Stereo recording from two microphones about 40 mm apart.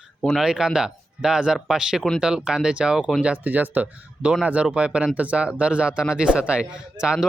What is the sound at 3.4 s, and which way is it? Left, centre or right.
Speech, right.